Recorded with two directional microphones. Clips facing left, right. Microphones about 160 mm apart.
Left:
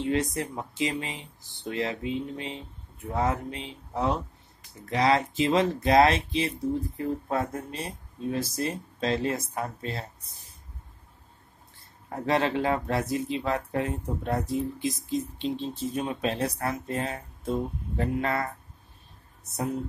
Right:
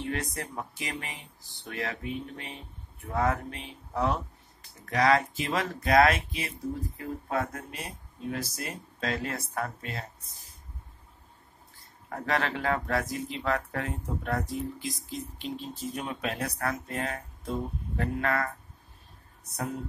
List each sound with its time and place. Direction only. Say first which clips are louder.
0.0 s speech: left 7 dB; 20° left (ahead or behind)
9.8 s speech: left 4 dB; 30° left (ahead or behind)
12.1 s speech: left 4 dB; 25° left (ahead or behind)